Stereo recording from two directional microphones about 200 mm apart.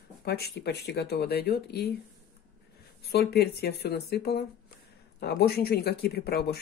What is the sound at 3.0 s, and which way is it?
Speech, 50° left (ahead or behind).